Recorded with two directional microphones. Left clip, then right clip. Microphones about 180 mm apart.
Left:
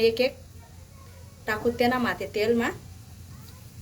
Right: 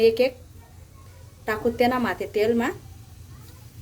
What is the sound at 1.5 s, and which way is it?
A woman's voice, 45° right (ahead or behind).